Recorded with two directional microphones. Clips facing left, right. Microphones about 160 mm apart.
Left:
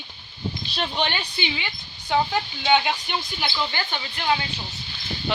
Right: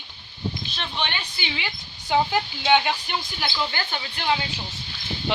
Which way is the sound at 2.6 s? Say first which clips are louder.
Even; centre (ahead or behind).